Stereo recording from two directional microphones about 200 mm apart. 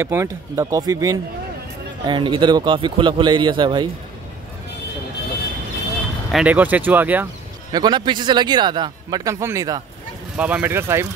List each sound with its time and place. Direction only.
0.0 s a man's voice: 15° right (ahead or behind)
6.3 s speech: 5° right (ahead or behind)
7.7 s a man's voice: 20° right (ahead or behind)